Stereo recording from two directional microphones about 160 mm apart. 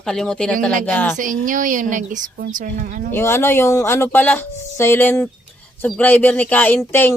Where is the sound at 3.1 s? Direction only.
15° left (ahead or behind).